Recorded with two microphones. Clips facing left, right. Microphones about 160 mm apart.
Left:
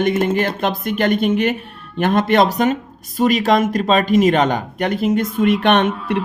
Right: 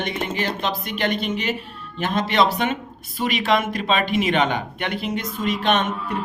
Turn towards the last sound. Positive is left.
turn(degrees=60)  # may be behind; listen again after turning